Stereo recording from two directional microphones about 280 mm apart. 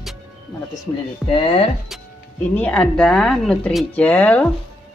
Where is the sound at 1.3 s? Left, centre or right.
Centre.